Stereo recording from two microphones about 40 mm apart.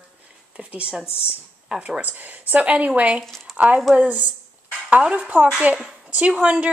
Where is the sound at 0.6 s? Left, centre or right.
Right.